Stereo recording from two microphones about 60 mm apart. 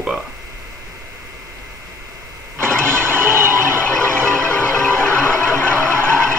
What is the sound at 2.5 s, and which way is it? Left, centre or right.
Vehicle, right.